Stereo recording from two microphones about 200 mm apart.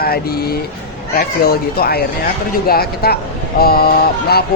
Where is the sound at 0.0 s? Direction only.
50° left (ahead or behind).